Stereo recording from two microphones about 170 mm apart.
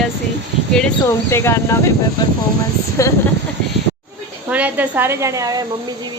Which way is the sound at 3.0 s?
20° left (ahead or behind).